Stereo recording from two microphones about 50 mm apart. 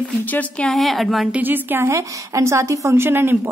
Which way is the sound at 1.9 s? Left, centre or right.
Right.